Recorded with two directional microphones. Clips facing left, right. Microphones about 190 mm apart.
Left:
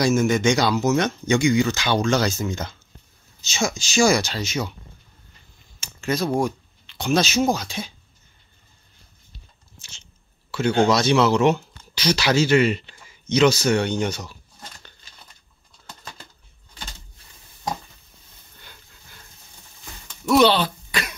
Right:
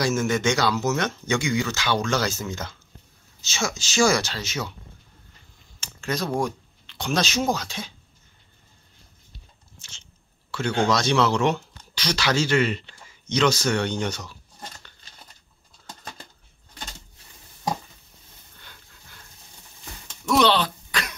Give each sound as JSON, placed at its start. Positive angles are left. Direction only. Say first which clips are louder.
{"t": 0.0, "sound": "speech", "louder": "left 4 dB", "side_deg": 15}
{"t": 5.8, "sound": "speech", "louder": "left 4 dB", "side_deg": 10}
{"t": 9.8, "sound": "biting", "louder": "left 2 dB", "side_deg": 10}
{"t": 10.5, "sound": "speech", "louder": "left 4 dB", "side_deg": 10}
{"t": 20.2, "sound": "a sound", "louder": "left 3 dB", "side_deg": 5}